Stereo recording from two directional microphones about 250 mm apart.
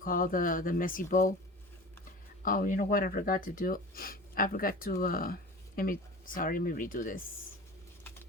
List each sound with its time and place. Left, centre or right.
0.0 s speech: left
2.4 s speech: left